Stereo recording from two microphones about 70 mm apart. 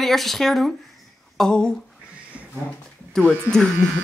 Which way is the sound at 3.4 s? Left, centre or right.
Centre.